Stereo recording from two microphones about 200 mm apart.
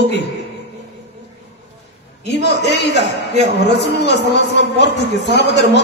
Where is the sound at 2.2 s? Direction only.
60° left (ahead or behind).